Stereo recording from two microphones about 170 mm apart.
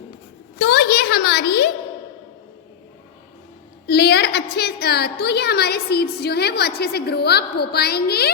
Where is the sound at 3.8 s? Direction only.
70° left (ahead or behind).